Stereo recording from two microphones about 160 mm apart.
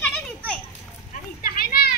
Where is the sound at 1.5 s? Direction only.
70° left (ahead or behind).